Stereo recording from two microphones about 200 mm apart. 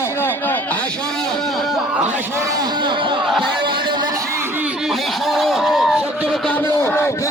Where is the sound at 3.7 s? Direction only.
20° right (ahead or behind).